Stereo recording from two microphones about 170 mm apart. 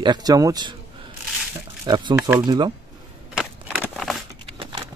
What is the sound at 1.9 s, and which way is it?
Speech, 25° right (ahead or behind).